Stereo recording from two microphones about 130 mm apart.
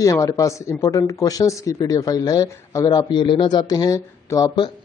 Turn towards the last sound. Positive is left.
turn(degrees=25)  # may be behind; listen again after turning